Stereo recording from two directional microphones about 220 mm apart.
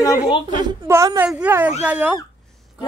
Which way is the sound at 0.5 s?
15° right (ahead or behind).